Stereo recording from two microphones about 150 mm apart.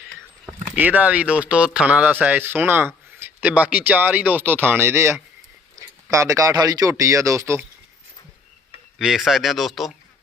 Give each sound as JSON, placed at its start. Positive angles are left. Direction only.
{"t": 0.8, "sound": "speech", "side_deg": -10}
{"t": 9.0, "sound": "speech", "side_deg": 0}